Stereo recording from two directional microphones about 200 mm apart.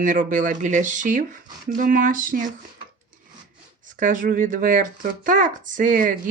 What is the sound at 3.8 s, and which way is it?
Speech, 40° right (ahead or behind).